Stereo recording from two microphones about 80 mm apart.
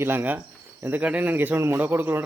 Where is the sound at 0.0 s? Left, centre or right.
Right.